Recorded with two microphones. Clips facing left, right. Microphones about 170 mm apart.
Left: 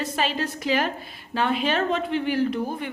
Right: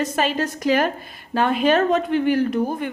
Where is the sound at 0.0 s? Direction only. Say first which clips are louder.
Right 4 dB; 45° right (ahead or behind).